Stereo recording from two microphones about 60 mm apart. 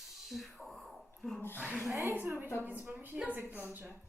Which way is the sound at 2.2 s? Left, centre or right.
Right.